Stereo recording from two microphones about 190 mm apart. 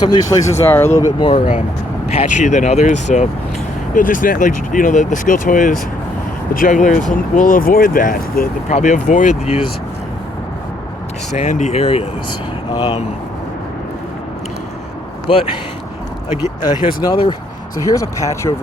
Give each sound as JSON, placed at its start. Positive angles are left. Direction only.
{"t": 0.0, "sound": "speech", "side_deg": 20}
{"t": 1.2, "sound": "speech", "side_deg": 30}
{"t": 11.3, "sound": "speech", "side_deg": 40}
{"t": 16.6, "sound": "speech", "side_deg": 20}